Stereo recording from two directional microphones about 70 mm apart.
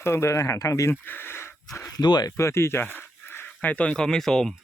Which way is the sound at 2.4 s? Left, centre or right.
Left.